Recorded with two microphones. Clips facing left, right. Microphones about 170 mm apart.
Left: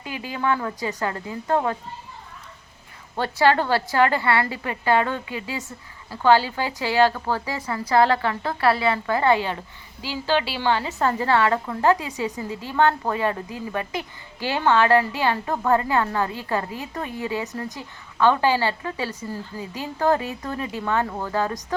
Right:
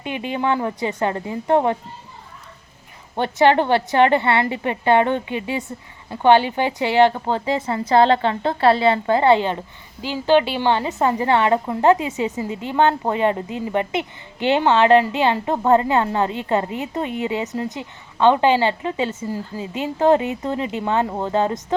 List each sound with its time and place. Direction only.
0.0 s speech: 25° right (ahead or behind)
3.2 s speech: 20° right (ahead or behind)